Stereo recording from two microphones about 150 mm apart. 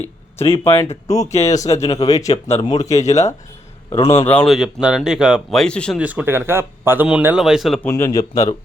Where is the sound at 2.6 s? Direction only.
25° left (ahead or behind).